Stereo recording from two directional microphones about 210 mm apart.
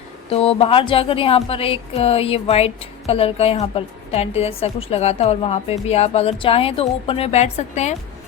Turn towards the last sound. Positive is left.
turn(degrees=35)  # may be behind; listen again after turning